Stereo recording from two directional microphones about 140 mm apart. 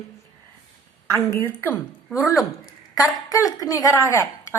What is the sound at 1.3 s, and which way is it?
Speech, 20° left (ahead or behind).